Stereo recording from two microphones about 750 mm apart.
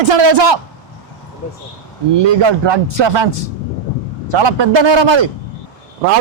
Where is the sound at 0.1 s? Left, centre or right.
Right.